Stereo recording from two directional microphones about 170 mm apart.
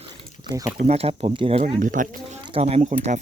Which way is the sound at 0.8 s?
35° right (ahead or behind).